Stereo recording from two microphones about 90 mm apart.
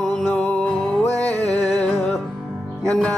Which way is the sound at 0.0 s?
5° left (ahead or behind).